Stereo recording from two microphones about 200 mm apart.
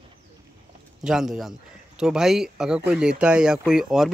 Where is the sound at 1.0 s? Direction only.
5° right (ahead or behind).